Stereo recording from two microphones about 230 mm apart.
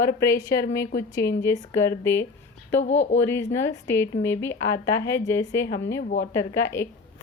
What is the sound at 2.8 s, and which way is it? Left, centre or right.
Speech, left.